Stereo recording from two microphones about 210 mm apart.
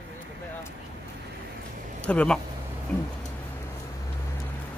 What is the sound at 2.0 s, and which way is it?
Speech, 5° left (ahead or behind).